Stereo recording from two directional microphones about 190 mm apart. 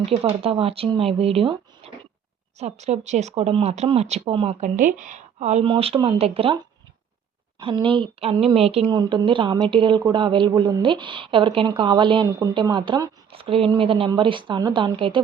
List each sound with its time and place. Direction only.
0.0 s speech: 30° right (ahead or behind)
4.8 s speech: 40° right (ahead or behind)
7.6 s a woman's voice: 25° right (ahead or behind)